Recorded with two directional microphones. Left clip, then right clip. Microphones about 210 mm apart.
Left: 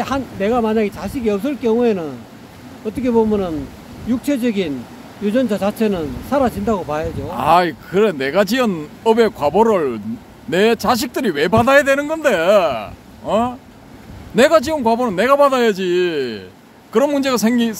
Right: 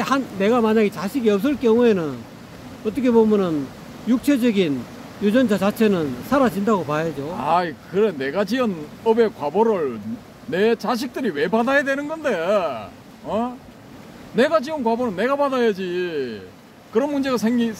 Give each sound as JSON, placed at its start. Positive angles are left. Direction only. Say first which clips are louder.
{"t": 0.0, "sound": "speech", "louder": "left 1 dB", "side_deg": -15}
{"t": 7.3, "sound": "speech", "louder": "left 7 dB", "side_deg": 35}